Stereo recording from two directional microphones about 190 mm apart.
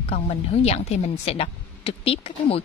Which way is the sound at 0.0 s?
35° left (ahead or behind).